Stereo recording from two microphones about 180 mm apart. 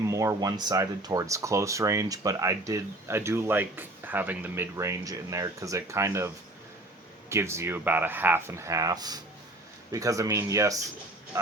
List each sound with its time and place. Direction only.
0.0 s speech: 15° right (ahead or behind)